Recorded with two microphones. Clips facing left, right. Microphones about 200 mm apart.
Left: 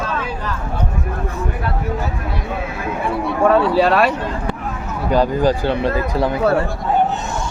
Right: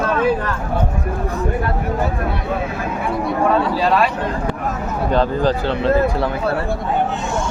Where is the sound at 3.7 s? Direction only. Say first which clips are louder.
Left 2 dB; 65° left (ahead or behind).